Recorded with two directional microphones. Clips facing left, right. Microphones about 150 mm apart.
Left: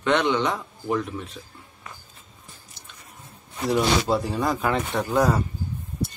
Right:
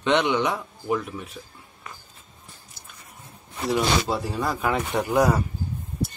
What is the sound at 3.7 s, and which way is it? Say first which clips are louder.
Speech: left 2 dB; centre (ahead or behind).